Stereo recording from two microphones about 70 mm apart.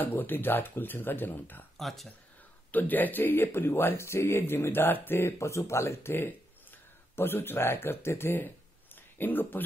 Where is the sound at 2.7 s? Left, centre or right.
Left.